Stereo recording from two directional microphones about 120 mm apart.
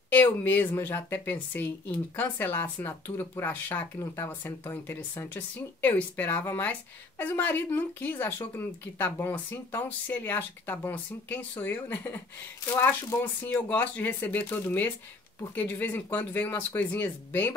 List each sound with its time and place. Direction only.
0.1 s speech: 15° left (ahead or behind)